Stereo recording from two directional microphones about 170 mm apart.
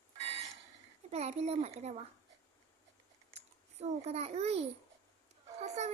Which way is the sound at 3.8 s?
40° right (ahead or behind).